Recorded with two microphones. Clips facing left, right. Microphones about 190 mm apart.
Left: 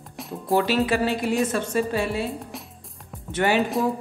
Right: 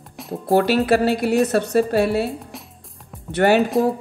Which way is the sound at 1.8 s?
65° right (ahead or behind).